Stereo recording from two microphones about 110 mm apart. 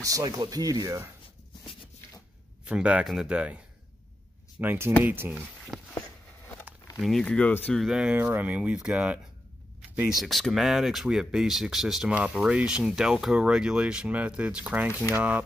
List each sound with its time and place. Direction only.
0.0 s speech: 35° right (ahead or behind)
2.6 s speech: 10° right (ahead or behind)
4.6 s speech: 20° right (ahead or behind)
5.7 s a sound: 5° left (ahead or behind)
7.0 s speech: centre (ahead or behind)
7.2 s speech: 10° left (ahead or behind)
7.7 s speech: 5° right (ahead or behind)